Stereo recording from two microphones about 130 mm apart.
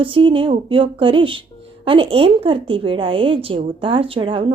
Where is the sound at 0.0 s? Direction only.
40° right (ahead or behind).